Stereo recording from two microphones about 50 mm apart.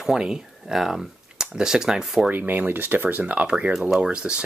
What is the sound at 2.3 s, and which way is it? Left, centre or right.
Speech, right.